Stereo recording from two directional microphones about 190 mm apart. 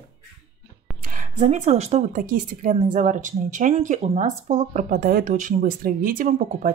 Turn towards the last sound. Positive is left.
turn(degrees=-45)  # may be behind; listen again after turning